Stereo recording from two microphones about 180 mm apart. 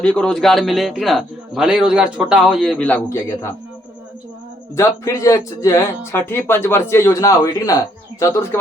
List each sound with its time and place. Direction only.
0.0 s a man's voice: 5° left (ahead or behind)
4.7 s speech: 15° left (ahead or behind)